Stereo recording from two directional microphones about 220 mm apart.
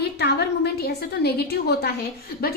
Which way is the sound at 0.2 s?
50° left (ahead or behind).